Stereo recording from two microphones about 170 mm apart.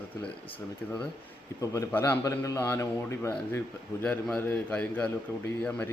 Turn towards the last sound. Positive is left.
turn(degrees=10)  # may be behind; listen again after turning